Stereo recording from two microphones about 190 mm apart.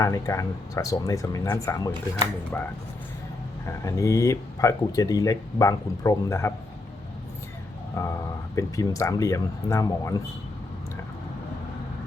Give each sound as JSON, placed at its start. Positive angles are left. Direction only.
{"t": 0.0, "sound": "speech", "side_deg": 15}
{"t": 3.8, "sound": "speech", "side_deg": 15}
{"t": 8.0, "sound": "speech", "side_deg": 15}